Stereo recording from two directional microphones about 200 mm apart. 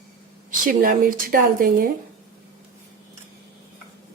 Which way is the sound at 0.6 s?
40° right (ahead or behind).